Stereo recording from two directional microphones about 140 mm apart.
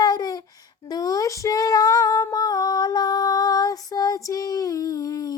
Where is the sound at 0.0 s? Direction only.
25° left (ahead or behind).